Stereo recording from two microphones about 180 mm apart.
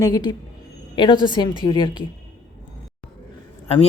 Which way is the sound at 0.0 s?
25° left (ahead or behind).